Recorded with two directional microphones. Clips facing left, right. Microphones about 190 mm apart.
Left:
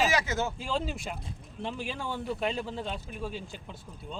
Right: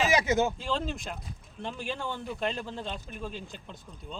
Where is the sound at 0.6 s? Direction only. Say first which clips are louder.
Even; 5° left (ahead or behind).